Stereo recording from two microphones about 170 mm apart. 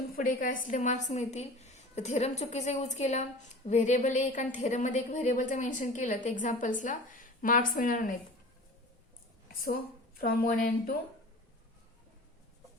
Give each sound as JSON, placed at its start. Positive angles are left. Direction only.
{"t": 0.1, "sound": "a woman's voice", "side_deg": 55}
{"t": 10.2, "sound": "a woman's voice", "side_deg": 60}